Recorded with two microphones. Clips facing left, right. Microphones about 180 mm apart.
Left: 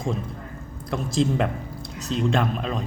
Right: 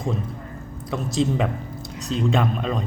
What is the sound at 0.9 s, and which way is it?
Speech, centre (ahead or behind).